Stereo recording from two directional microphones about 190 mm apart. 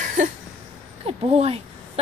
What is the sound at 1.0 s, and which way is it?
Speech, 30° right (ahead or behind).